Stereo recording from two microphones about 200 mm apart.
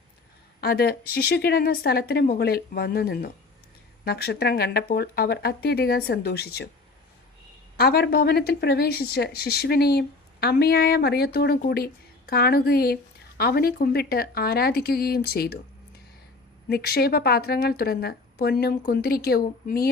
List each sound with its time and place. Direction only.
0.6 s a woman's voice: 50° left (ahead or behind)
7.8 s a woman's voice: 50° left (ahead or behind)
16.6 s a woman's voice: 50° left (ahead or behind)